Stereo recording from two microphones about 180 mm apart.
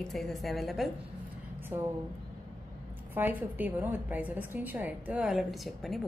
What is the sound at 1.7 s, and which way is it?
Speech, 15° right (ahead or behind).